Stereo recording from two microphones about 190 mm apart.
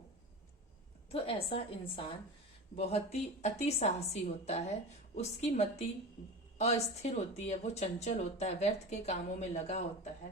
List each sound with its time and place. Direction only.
1.1 s a woman's voice: 30° left (ahead or behind)
2.7 s speech: 30° left (ahead or behind)